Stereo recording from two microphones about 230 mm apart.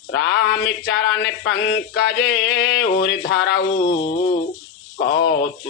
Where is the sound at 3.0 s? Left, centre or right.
Left.